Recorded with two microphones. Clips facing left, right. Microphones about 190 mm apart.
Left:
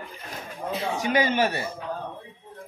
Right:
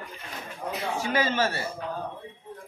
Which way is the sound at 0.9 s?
15° left (ahead or behind).